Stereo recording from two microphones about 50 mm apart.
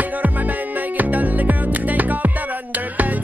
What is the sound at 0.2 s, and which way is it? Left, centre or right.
Music, right.